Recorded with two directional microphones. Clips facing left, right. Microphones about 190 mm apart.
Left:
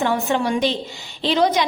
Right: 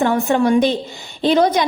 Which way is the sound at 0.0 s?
50° right (ahead or behind).